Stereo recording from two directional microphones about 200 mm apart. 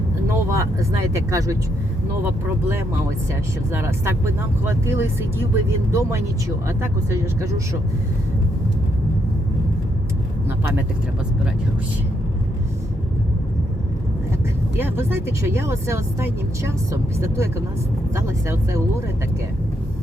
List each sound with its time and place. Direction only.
0.3 s speech: 15° right (ahead or behind)
14.8 s speech: 10° right (ahead or behind)